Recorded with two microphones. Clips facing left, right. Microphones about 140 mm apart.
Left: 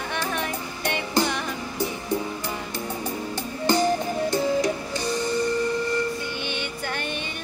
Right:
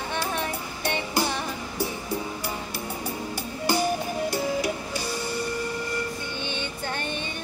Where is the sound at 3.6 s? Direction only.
10° right (ahead or behind).